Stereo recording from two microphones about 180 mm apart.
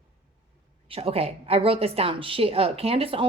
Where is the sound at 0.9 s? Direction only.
30° right (ahead or behind).